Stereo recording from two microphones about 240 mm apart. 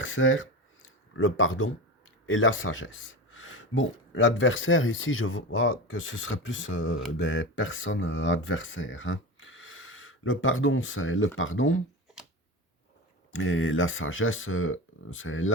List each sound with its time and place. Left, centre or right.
0.0 s speech: left
12.1 s a sound: centre
13.3 s speech: left